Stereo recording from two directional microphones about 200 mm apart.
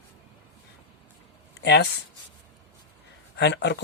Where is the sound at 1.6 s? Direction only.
55° left (ahead or behind).